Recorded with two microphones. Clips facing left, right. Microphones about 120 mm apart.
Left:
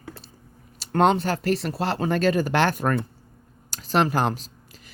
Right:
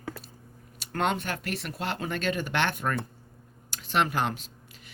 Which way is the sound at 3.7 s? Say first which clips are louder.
Left 5 dB; 40° left (ahead or behind).